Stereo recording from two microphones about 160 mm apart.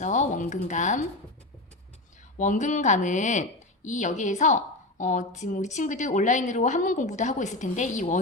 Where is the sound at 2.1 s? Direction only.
50° left (ahead or behind).